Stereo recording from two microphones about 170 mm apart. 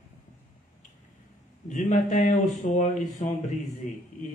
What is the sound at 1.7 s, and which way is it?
A man's voice, 45° left (ahead or behind).